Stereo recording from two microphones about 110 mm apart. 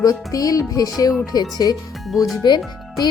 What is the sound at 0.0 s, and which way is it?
Speech, 35° left (ahead or behind).